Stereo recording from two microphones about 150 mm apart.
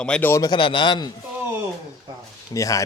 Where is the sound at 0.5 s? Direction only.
35° left (ahead or behind).